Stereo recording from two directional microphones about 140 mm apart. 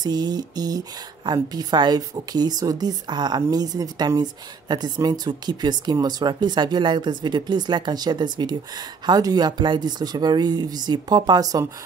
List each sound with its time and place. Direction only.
0.0 s speech: 30° right (ahead or behind)